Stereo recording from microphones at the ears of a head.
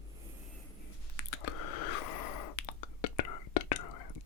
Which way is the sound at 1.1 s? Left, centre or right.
Left.